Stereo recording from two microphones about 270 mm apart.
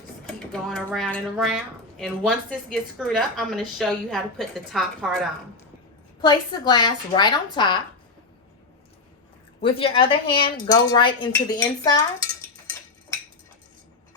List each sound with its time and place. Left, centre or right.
0.5 s a woman's voice: centre
6.2 s a woman's voice: centre
9.6 s a woman's voice: centre